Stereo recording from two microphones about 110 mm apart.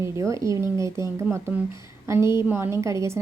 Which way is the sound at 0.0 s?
30° right (ahead or behind).